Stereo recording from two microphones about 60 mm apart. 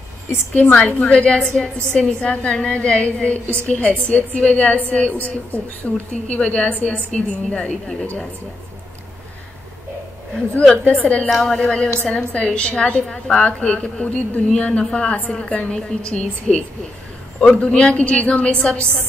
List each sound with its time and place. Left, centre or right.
0.3 s a woman's voice: left
1.0 s a woman's voice: centre
10.7 s a woman's voice: left
11.2 s a woman's voice: centre
12.0 s a woman's voice: centre